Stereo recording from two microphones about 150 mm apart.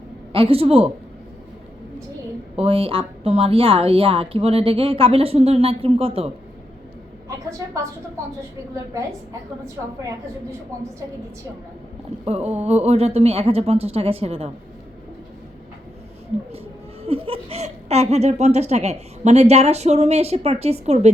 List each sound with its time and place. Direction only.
0.3 s a woman's voice: 40° right (ahead or behind)
2.6 s a woman's voice: 40° right (ahead or behind)
12.2 s speech: 45° right (ahead or behind)
17.0 s speech: 40° right (ahead or behind)